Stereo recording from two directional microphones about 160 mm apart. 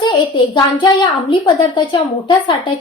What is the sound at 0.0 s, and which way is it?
A child's voice, 30° left (ahead or behind).